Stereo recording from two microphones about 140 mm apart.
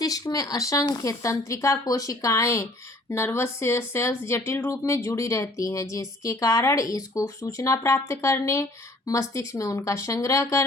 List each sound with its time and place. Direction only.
0.0 s speech: 25° left (ahead or behind)